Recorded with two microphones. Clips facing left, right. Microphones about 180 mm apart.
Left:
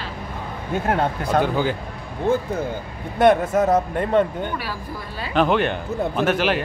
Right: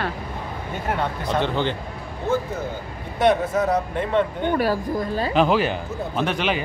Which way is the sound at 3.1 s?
50° left (ahead or behind).